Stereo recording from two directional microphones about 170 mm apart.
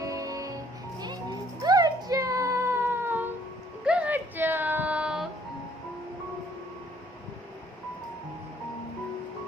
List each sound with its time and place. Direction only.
0.0 s music: 20° right (ahead or behind)
1.6 s a sound: 20° right (ahead or behind)
3.8 s child singing: 5° right (ahead or behind)